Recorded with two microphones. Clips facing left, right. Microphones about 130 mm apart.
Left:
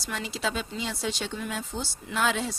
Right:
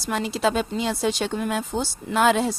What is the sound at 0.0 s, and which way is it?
Speech, 50° right (ahead or behind).